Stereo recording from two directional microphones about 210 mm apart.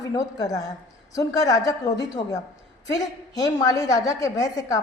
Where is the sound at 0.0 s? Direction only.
15° left (ahead or behind).